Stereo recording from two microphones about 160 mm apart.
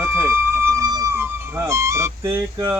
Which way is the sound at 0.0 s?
15° right (ahead or behind).